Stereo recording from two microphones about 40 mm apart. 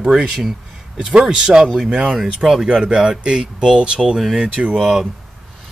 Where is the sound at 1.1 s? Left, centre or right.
Centre.